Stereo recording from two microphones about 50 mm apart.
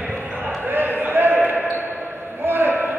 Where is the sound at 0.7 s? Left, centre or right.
Right.